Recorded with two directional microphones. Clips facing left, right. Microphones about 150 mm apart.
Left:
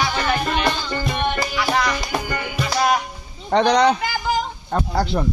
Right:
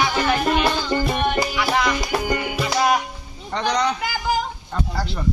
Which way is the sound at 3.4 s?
65° left (ahead or behind).